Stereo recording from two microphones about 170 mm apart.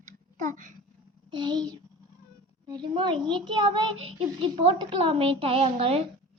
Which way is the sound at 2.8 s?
30° right (ahead or behind).